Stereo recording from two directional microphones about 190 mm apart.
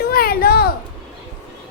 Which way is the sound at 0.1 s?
50° left (ahead or behind).